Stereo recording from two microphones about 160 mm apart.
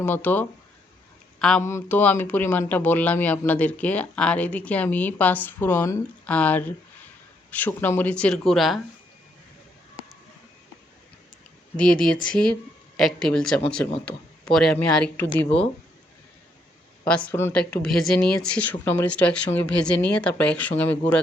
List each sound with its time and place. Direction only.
0.0 s speech: 10° left (ahead or behind)
1.6 s speech: 15° left (ahead or behind)
11.8 s speech: 5° left (ahead or behind)
17.1 s speech: 10° left (ahead or behind)